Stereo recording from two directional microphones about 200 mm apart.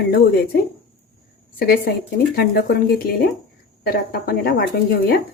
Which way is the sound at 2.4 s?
50° left (ahead or behind).